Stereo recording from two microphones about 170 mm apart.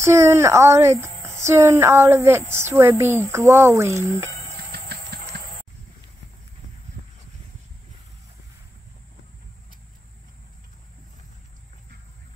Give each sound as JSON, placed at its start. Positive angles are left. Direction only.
{"t": 0.0, "sound": "speech", "side_deg": -15}
{"t": 4.7, "sound": "engine", "side_deg": -70}